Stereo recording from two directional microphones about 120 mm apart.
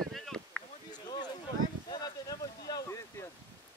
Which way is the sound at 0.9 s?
35° left (ahead or behind).